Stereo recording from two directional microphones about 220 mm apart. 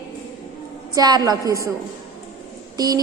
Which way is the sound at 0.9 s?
15° right (ahead or behind).